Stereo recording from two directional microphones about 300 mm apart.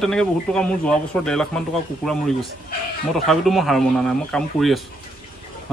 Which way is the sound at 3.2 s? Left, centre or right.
Centre.